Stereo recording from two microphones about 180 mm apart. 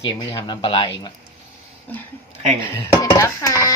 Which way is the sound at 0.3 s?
30° left (ahead or behind).